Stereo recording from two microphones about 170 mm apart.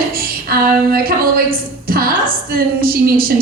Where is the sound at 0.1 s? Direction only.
60° right (ahead or behind).